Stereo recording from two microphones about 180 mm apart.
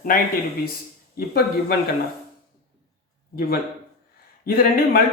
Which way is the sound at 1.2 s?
55° left (ahead or behind).